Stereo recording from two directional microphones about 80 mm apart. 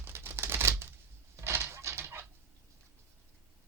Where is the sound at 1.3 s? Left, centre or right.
Right.